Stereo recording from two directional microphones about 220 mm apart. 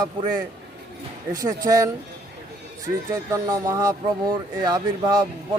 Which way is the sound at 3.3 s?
15° right (ahead or behind).